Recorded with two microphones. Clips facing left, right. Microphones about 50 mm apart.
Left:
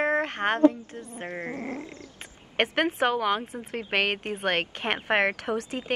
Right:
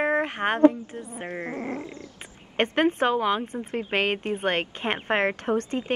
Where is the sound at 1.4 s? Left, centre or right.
Right.